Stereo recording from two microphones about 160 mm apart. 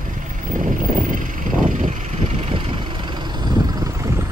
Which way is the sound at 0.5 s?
55° right (ahead or behind).